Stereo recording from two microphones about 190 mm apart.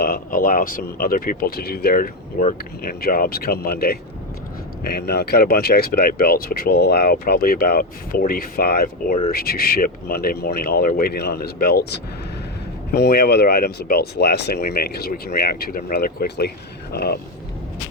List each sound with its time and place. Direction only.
0.0 s speech: 50° left (ahead or behind)